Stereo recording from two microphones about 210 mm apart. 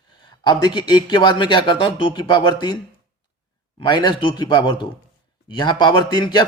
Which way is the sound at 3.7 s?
20° left (ahead or behind).